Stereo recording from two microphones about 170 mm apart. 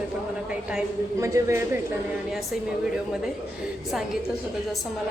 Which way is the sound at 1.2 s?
15° right (ahead or behind).